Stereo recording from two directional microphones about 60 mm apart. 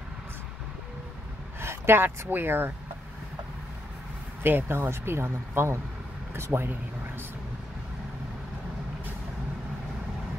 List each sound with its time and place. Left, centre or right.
1.6 s a sound: right
2.0 s speech: right
4.4 s speech: right